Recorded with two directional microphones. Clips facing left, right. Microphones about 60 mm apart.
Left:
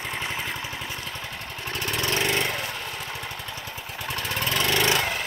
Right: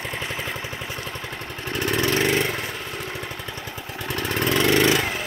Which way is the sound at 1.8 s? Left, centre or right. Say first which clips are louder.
Right 5 dB; right.